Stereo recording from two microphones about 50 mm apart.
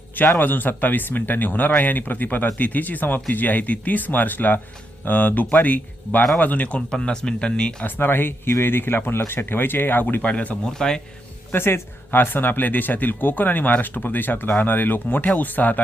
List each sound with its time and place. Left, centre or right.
0.3 s speech: left; by 7.9 s centre
7.9 s speech: left
10.2 s speech: left
10.7 s speech: centre
11.5 s speech: left